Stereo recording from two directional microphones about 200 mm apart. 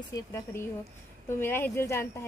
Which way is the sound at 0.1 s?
15° left (ahead or behind).